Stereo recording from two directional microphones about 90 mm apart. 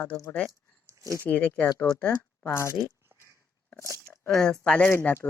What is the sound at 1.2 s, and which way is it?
Speech, 15° left (ahead or behind).